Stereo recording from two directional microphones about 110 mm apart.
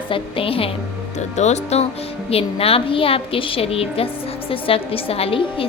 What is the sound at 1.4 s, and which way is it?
Speech, 90° left.